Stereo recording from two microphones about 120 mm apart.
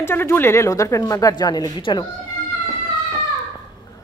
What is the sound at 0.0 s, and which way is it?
A woman's voice, 20° left (ahead or behind).